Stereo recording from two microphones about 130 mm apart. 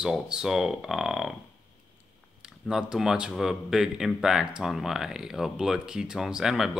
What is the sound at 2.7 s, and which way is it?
Speech, 5° right (ahead or behind).